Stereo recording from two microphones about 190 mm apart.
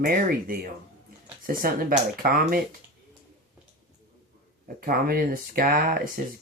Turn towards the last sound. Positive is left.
turn(degrees=-50)  # may be behind; listen again after turning